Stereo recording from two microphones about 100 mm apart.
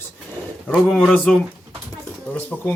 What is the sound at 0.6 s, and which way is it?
Speech, 10° left (ahead or behind).